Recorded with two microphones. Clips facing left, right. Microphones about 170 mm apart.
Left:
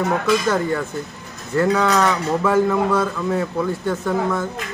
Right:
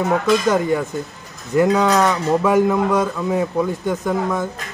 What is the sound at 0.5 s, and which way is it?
A man's voice, 15° right (ahead or behind).